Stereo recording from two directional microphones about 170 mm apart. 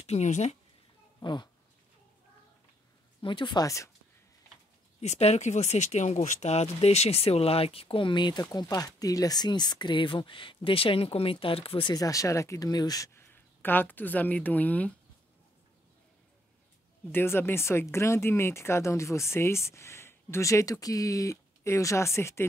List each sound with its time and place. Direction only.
0.0 s speech: 40° left (ahead or behind)
1.2 s speech: 25° left (ahead or behind)
3.2 s speech: 30° left (ahead or behind)
5.0 s speech: 40° left (ahead or behind); by 15.0 s 10° left (ahead or behind)
17.1 s speech: 15° left (ahead or behind)